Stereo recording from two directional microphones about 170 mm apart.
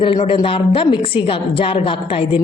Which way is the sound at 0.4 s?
30° left (ahead or behind).